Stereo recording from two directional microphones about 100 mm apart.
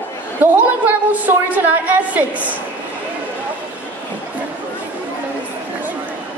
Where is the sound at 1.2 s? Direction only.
15° right (ahead or behind).